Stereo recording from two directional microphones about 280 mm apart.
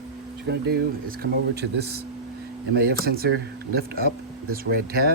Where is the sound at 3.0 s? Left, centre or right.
Right.